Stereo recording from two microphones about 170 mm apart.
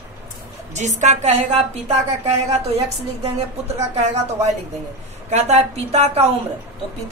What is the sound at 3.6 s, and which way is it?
Speech, 40° right (ahead or behind).